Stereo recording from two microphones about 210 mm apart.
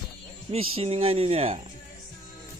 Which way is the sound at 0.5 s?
25° right (ahead or behind).